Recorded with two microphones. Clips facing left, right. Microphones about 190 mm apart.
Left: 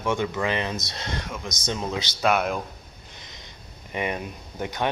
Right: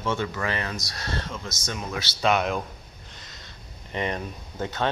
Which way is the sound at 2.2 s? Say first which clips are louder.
Even; centre (ahead or behind).